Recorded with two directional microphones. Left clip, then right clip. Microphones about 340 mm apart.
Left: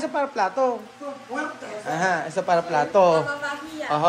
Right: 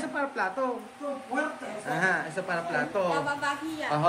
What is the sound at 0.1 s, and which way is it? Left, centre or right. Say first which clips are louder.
Speech: left 5 dB; centre.